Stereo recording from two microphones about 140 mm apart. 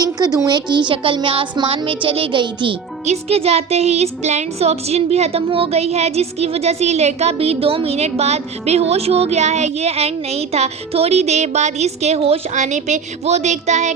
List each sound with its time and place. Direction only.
0.0 s a woman's voice: 30° right (ahead or behind)
3.1 s speech: 45° right (ahead or behind)